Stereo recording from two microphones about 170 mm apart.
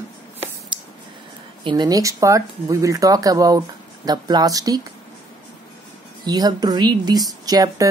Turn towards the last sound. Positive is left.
turn(degrees=-20)  # may be behind; listen again after turning